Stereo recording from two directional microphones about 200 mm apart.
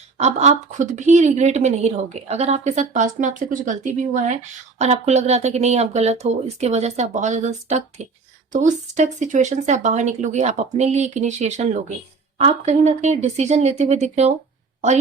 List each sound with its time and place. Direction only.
0.2 s a woman's voice: 35° right (ahead or behind)